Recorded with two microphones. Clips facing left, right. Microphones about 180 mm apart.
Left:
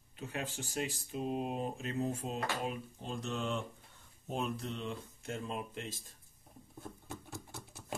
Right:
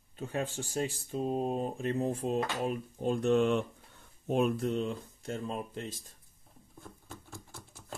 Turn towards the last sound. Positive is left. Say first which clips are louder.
# left 2 dB
turn(degrees=20)  # may be behind; listen again after turning